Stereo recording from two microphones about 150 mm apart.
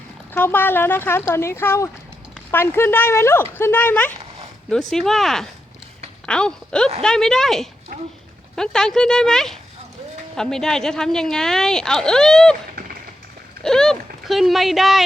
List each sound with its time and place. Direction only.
0.3 s speech: 15° left (ahead or behind)
13.6 s speech: 5° left (ahead or behind)